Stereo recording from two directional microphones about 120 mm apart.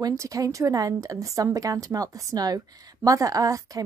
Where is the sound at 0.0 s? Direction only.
25° right (ahead or behind).